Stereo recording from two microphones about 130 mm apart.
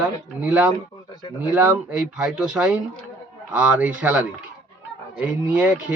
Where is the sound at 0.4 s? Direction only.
10° right (ahead or behind).